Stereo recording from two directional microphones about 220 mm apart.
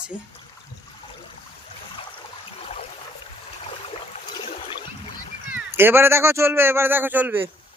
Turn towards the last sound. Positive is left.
turn(degrees=-10)  # may be behind; listen again after turning